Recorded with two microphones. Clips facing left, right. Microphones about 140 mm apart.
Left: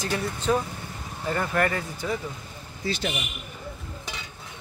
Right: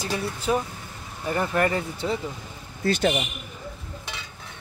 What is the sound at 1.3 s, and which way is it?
Speech, 20° right (ahead or behind).